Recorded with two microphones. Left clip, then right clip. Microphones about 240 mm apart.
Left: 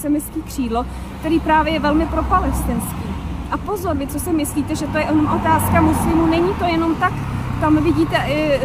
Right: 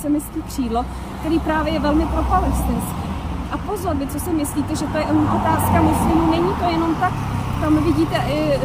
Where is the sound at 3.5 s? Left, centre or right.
Centre.